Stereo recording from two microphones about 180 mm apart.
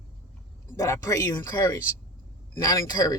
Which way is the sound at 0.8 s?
20° left (ahead or behind).